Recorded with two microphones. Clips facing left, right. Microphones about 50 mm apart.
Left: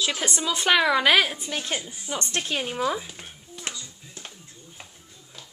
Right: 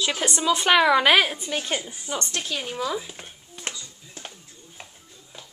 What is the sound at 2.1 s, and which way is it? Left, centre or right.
Speech, left.